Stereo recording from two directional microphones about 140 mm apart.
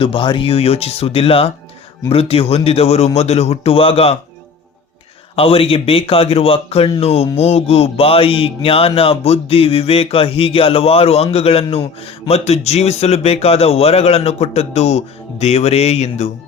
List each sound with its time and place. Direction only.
0.0 s speech: 40° left (ahead or behind)
5.4 s speech: 40° left (ahead or behind)